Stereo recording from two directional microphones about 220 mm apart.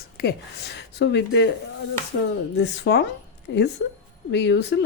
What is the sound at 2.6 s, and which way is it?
A woman's voice, 50° left (ahead or behind).